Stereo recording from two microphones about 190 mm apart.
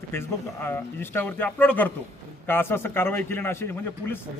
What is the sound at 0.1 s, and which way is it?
Speech, 10° left (ahead or behind).